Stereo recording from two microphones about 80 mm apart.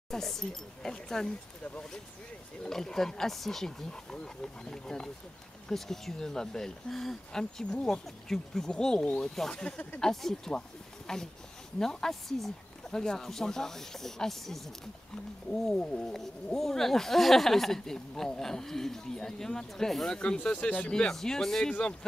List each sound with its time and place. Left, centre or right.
0.1 s speech: centre